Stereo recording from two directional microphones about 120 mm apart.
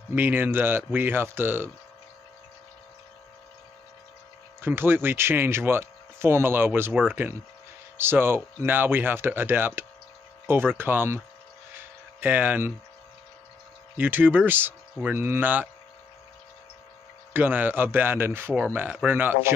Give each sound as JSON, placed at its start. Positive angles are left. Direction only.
{"t": 0.1, "sound": "speech", "side_deg": -15}
{"t": 4.6, "sound": "speech", "side_deg": -20}
{"t": 11.7, "sound": "a sound", "side_deg": -15}
{"t": 13.9, "sound": "speech", "side_deg": -15}
{"t": 17.3, "sound": "speech", "side_deg": -15}